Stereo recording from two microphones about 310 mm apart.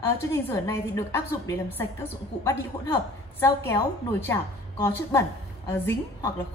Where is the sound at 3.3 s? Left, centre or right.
Centre.